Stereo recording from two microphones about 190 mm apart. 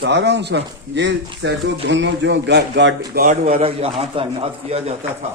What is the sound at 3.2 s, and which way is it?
A man's voice, 45° right (ahead or behind).